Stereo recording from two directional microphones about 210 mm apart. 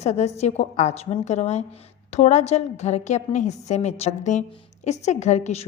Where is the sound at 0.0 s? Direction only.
30° left (ahead or behind).